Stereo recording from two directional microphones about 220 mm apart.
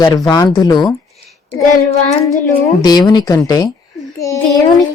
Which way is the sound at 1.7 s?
35° left (ahead or behind).